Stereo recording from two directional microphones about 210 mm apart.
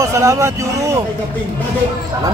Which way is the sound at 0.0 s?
15° right (ahead or behind).